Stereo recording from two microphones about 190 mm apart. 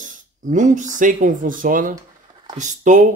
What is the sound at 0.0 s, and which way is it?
Speech, 40° right (ahead or behind).